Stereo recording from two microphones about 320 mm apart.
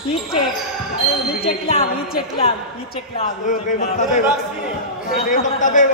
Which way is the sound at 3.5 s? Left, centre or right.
Left.